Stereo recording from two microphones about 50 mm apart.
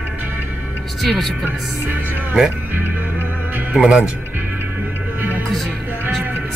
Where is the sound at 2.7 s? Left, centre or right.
Right.